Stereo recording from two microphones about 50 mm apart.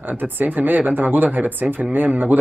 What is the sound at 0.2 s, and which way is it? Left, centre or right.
Speech, right.